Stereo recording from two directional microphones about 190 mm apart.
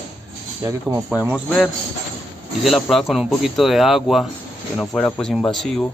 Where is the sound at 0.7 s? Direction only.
15° right (ahead or behind).